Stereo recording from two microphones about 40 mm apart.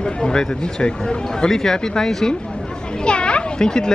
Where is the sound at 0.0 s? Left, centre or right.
Centre.